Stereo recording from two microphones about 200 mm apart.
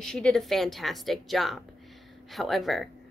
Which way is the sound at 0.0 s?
5° left (ahead or behind).